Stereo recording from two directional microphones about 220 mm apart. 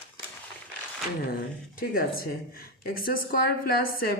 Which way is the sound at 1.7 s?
40° left (ahead or behind).